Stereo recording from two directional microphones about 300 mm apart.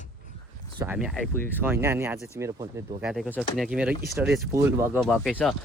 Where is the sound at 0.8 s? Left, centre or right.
Centre.